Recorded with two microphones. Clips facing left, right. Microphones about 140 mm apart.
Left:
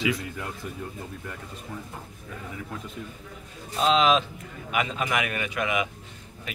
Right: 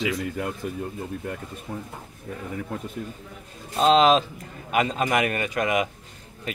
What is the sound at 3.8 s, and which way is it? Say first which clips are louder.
Speech: right 4 dB; 40° right (ahead or behind).